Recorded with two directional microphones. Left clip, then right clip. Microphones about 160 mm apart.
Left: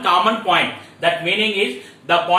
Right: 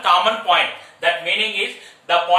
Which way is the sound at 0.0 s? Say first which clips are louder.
Even; 30° right (ahead or behind).